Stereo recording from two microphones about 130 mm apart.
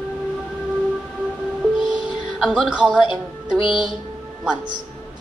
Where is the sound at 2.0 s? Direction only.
Centre (ahead or behind).